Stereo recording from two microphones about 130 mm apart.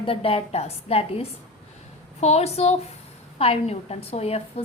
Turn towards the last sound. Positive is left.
turn(degrees=50)  # may be behind; listen again after turning